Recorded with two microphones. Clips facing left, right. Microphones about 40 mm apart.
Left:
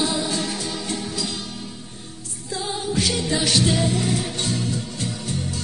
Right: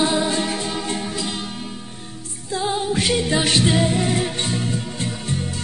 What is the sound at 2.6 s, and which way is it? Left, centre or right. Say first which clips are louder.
Music: right 3 dB; right.